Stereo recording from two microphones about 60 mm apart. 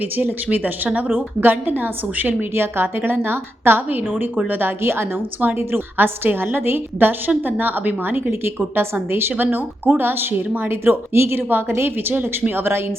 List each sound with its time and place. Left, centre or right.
0.2 s a woman's voice: right